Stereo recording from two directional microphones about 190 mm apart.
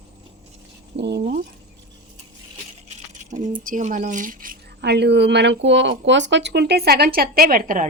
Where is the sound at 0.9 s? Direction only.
65° right (ahead or behind).